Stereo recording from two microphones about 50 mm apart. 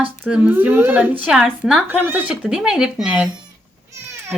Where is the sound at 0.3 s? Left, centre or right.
Right.